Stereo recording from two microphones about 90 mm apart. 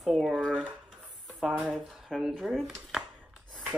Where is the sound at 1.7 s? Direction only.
5° left (ahead or behind).